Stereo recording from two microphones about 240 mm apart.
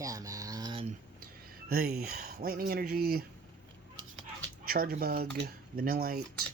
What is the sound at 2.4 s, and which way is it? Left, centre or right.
Speech, right.